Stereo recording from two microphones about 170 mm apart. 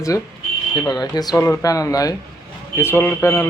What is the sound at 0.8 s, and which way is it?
A man's voice, 25° left (ahead or behind).